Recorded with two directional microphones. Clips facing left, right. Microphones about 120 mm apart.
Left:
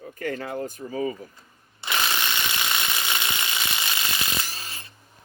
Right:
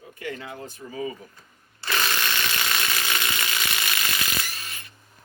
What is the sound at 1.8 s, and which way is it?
Ratchet, 20° left (ahead or behind).